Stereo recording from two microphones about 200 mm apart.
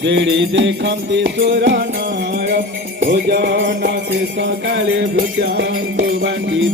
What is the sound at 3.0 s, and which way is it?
Jingle bell, 50° right (ahead or behind).